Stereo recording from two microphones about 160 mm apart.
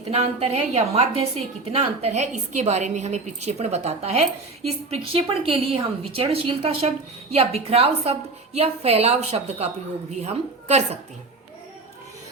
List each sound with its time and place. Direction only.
0.1 s a woman's voice: 40° right (ahead or behind)